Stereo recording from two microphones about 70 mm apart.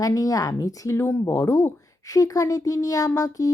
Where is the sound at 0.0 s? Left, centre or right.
Left.